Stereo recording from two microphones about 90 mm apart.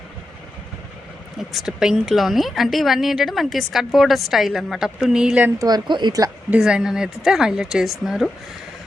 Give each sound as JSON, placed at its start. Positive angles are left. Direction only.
{"t": 1.4, "sound": "a woman's voice", "side_deg": -5}
{"t": 5.5, "sound": "speech", "side_deg": -50}
{"t": 6.5, "sound": "speech", "side_deg": -10}